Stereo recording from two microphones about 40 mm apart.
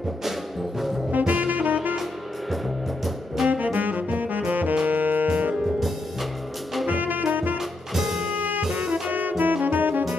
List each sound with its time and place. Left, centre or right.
1.1 s music: right
3.4 s saxophone: right
4.8 s music: right
6.9 s music: right
7.5 s music: centre
8.4 s music: right